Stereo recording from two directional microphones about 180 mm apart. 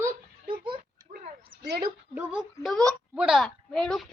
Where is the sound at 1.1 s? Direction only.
65° right (ahead or behind).